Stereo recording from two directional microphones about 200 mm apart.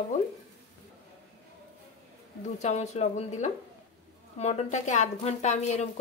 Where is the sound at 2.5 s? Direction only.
35° left (ahead or behind).